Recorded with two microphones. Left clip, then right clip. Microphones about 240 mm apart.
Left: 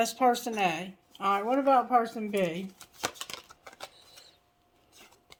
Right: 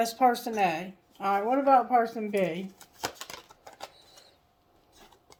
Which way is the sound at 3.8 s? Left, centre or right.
Left.